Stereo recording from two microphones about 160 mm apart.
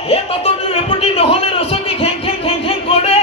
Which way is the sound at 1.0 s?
35° left (ahead or behind).